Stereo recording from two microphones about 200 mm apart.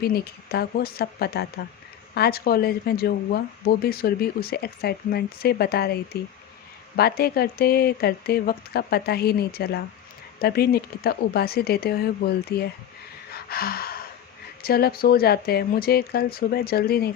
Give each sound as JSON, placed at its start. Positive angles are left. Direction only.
{"t": 0.0, "sound": "speech", "side_deg": 50}
{"t": 13.3, "sound": "gasp", "side_deg": 50}
{"t": 14.6, "sound": "speech", "side_deg": 50}